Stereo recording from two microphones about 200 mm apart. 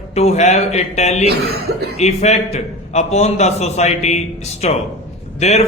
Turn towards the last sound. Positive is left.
turn(degrees=35)  # may be behind; listen again after turning